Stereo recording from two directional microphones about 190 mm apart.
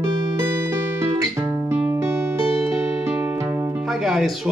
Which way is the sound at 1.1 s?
15° right (ahead or behind).